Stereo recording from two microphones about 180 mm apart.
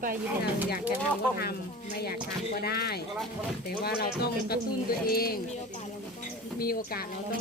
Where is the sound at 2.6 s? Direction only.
60° left (ahead or behind).